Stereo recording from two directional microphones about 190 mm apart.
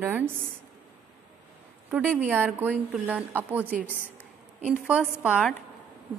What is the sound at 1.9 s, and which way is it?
Speech, 10° right (ahead or behind).